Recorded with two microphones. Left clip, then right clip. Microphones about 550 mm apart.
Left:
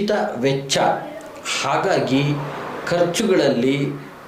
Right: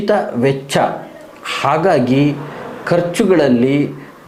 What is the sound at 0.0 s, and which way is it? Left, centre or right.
Speech, right.